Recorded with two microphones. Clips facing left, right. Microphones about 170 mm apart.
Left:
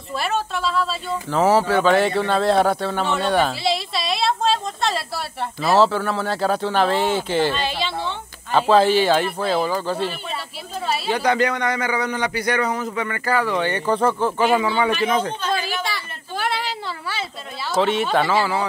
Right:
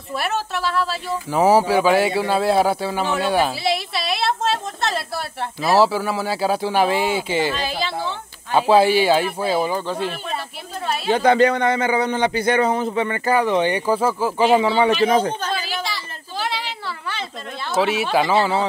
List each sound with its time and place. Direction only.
0.1 s speech: 5° right (ahead or behind)
1.4 s a man's voice: 15° right (ahead or behind)
11.1 s a man's voice: 25° right (ahead or behind); by 14.3 s 5° right (ahead or behind)
14.6 s a man's voice: 25° right (ahead or behind)
15.0 s speech: 40° right (ahead or behind)
15.5 s a sound: 50° left (ahead or behind)
17.7 s speech: 5° right (ahead or behind)
18.3 s a man's voice: 20° right (ahead or behind)